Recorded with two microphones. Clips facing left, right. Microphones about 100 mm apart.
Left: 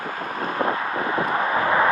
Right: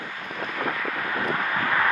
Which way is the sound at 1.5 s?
25° left (ahead or behind).